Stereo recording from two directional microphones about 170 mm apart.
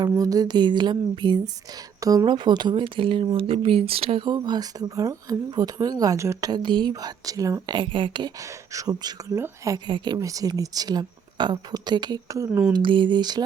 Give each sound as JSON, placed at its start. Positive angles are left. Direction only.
{"t": 0.0, "sound": "speech", "side_deg": -20}
{"t": 12.7, "sound": "speech", "side_deg": -30}